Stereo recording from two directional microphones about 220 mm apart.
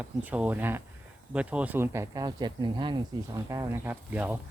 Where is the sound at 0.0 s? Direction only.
5° right (ahead or behind).